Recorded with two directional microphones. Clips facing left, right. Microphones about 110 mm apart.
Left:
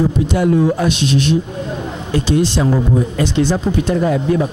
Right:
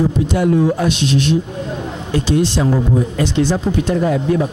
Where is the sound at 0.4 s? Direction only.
20° left (ahead or behind).